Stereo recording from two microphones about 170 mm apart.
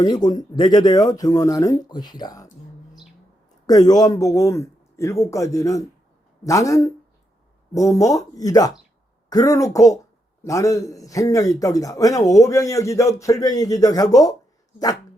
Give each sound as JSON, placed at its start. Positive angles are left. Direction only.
{"t": 0.0, "sound": "a man's voice", "side_deg": 25}
{"t": 3.7, "sound": "a man's voice", "side_deg": 20}